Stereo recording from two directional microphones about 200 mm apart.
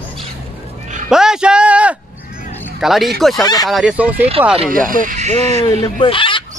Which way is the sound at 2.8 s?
Centre (ahead or behind).